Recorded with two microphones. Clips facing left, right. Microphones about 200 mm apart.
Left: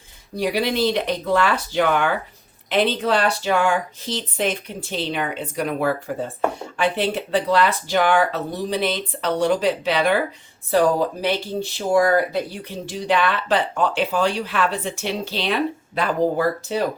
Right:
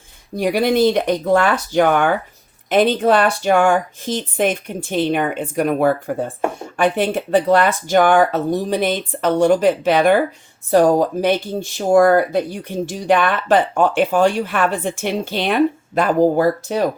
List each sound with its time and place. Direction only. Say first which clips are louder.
0.3 s speech: right 5 dB; 50° right (ahead or behind)